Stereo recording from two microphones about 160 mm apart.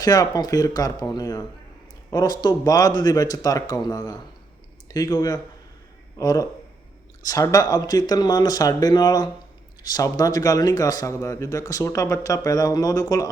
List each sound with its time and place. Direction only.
0.0 s speech: 25° left (ahead or behind)